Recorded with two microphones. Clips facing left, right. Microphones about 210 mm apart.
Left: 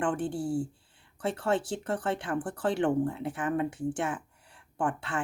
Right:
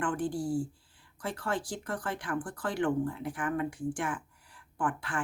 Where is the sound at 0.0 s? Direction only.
25° left (ahead or behind).